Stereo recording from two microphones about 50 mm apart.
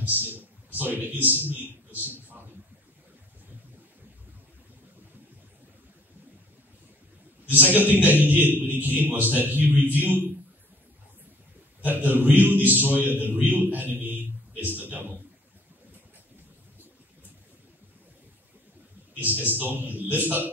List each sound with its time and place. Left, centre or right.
0.0 s a sound: right
7.4 s a man's voice: right
11.8 s a man's voice: right
19.1 s a man's voice: right